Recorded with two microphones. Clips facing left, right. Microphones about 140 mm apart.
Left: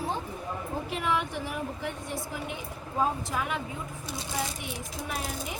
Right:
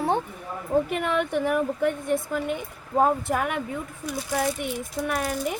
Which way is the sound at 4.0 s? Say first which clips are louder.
Right 7 dB; 30° left (ahead or behind).